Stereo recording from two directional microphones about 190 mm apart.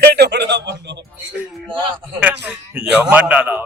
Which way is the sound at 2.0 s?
10° right (ahead or behind).